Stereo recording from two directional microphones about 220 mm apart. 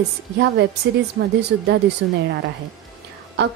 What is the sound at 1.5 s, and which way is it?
Speech, 50° right (ahead or behind).